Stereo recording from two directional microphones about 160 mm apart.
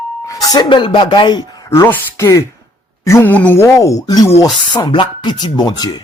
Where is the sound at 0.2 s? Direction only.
20° left (ahead or behind).